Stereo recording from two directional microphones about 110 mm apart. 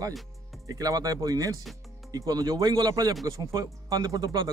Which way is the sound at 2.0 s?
35° right (ahead or behind).